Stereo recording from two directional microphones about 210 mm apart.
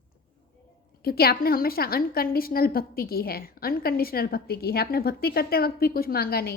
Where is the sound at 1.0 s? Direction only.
45° left (ahead or behind).